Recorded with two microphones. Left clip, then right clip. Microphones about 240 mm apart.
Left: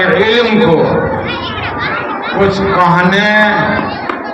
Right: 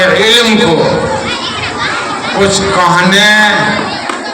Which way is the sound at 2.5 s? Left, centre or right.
Right.